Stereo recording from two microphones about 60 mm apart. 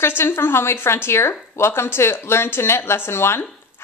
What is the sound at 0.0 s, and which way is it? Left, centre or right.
A woman's voice, left.